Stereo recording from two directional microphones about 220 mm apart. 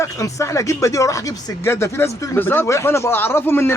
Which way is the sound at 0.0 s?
15° left (ahead or behind).